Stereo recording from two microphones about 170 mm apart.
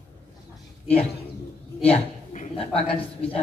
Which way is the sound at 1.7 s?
40° left (ahead or behind).